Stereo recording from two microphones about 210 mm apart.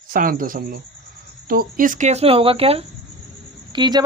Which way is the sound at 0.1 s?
40° right (ahead or behind).